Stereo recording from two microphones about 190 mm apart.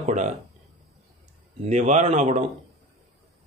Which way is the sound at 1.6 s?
40° right (ahead or behind).